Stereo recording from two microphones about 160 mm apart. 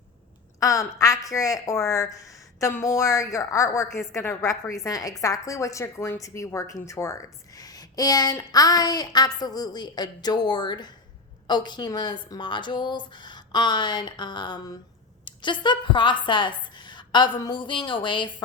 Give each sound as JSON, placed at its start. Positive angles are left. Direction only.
{"t": 0.6, "sound": "a woman's voice", "side_deg": 20}